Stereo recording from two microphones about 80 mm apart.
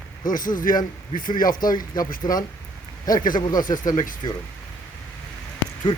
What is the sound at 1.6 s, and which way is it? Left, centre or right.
Speech, left.